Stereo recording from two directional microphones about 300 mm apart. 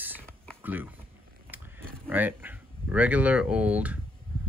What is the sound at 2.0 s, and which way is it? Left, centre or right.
Speech, centre.